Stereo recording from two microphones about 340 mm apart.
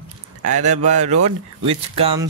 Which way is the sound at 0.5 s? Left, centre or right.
Right.